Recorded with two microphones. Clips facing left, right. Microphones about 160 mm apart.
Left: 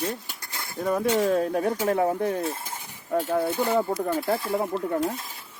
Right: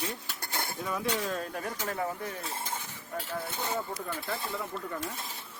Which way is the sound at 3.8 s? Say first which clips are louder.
Left 11 dB; 50° left (ahead or behind).